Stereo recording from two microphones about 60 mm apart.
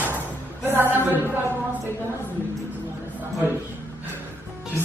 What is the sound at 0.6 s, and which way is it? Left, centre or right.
Music, right.